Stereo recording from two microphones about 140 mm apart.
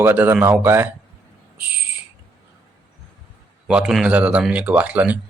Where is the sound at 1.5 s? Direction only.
10° right (ahead or behind).